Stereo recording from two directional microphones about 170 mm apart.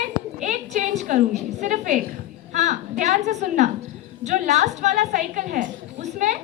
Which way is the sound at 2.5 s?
45° right (ahead or behind).